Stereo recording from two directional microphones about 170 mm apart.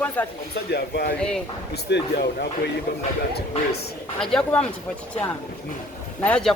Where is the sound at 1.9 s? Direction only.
75° left (ahead or behind).